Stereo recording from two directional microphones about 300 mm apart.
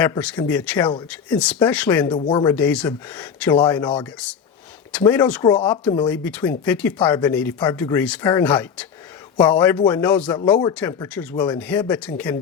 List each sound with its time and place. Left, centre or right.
0.0 s speech: centre
6.1 s speech: centre